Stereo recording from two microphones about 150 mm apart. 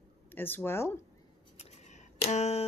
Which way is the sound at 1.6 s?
50° left (ahead or behind).